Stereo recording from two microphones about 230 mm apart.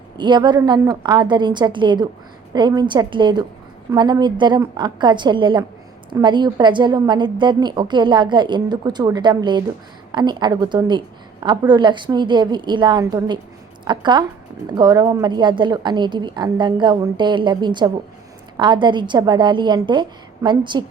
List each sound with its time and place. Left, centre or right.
0.2 s a woman's voice: centre